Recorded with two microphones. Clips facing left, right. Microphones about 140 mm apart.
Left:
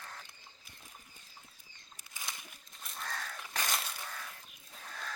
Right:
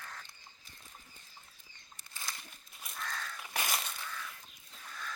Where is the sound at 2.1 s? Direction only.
15° left (ahead or behind).